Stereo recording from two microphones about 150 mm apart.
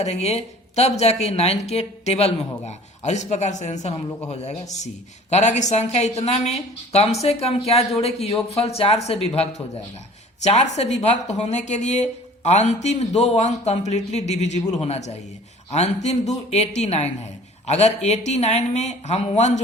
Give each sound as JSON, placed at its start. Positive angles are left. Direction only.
{"t": 0.0, "sound": "speech", "side_deg": 45}